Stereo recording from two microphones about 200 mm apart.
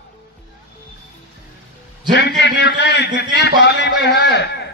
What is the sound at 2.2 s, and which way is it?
A man's voice, 55° left (ahead or behind).